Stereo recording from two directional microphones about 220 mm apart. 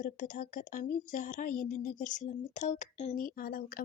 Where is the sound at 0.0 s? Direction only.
40° left (ahead or behind).